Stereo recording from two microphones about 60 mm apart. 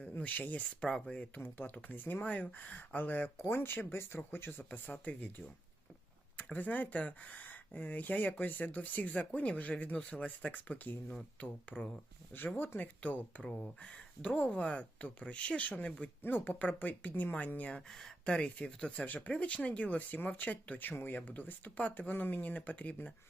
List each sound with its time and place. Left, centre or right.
0.0 s a sound: left
0.3 s speech: left
0.8 s speech: centre
1.4 s speech: left
6.3 s speech: left
12.3 s speech: left
13.4 s speech: centre
16.2 s speech: left